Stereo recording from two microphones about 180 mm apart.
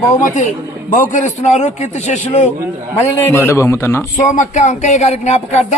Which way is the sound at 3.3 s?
15° left (ahead or behind).